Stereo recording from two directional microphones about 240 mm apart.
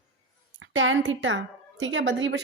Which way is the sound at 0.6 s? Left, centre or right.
Right.